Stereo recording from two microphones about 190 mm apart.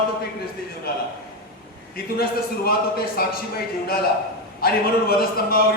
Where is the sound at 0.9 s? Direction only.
55° left (ahead or behind).